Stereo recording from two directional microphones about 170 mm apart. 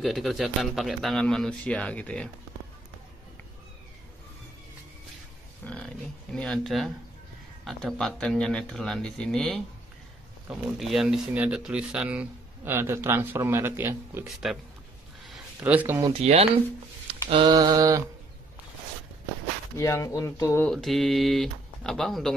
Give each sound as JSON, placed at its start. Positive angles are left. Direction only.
{"t": 0.0, "sound": "a man's voice", "side_deg": 0}
{"t": 5.6, "sound": "a man's voice", "side_deg": 10}
{"t": 14.2, "sound": "a man's voice", "side_deg": 0}
{"t": 15.6, "sound": "speech", "side_deg": -10}
{"t": 16.1, "sound": "speech", "side_deg": -35}
{"t": 17.4, "sound": "mantra", "side_deg": -20}
{"t": 19.8, "sound": "speech", "side_deg": 20}
{"t": 20.7, "sound": "a man's voice", "side_deg": 0}